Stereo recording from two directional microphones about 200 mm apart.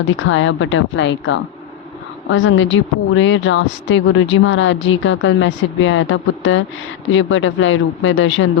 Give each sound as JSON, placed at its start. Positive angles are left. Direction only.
{"t": 0.1, "sound": "a woman's voice", "side_deg": 75}